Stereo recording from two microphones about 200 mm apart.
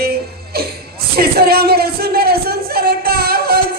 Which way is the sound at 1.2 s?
50° right (ahead or behind).